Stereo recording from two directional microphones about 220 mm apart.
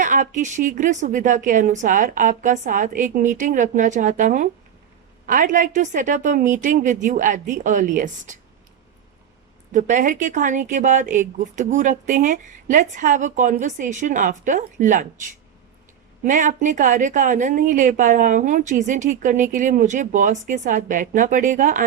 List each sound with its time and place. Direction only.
0.0 s speech: 35° right (ahead or behind)
9.7 s speech: 35° right (ahead or behind)
16.2 s speech: 35° right (ahead or behind)